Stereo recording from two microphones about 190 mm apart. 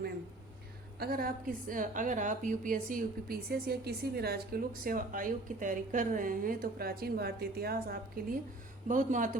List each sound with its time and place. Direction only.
0.9 s a woman's voice: 50° right (ahead or behind)